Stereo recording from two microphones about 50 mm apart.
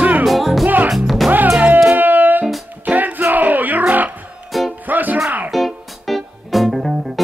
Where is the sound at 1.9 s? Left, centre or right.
Right.